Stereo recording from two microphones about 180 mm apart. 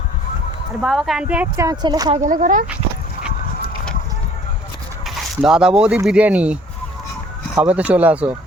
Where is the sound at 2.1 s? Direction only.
45° right (ahead or behind).